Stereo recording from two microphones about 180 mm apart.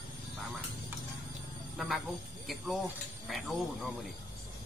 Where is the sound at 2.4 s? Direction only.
Centre (ahead or behind).